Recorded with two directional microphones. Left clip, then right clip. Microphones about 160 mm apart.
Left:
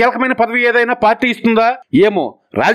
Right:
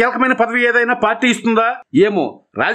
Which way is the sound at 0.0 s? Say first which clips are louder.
Left 1 dB; 35° left (ahead or behind).